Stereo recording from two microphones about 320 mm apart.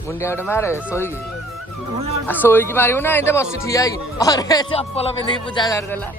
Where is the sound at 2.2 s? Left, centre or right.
Centre.